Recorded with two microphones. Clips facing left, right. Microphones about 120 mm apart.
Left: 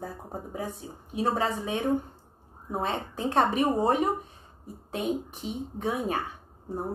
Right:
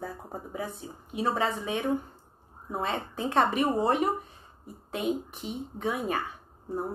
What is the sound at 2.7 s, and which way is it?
Speech, 35° left (ahead or behind).